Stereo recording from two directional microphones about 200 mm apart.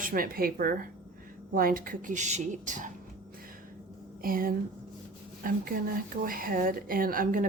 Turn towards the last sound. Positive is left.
turn(degrees=-45)  # may be behind; listen again after turning